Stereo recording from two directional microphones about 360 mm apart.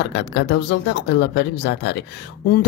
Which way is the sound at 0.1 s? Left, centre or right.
Left.